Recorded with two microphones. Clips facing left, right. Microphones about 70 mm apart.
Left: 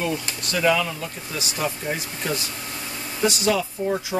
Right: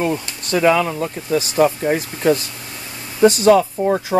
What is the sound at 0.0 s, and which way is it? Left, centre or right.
Speech, right.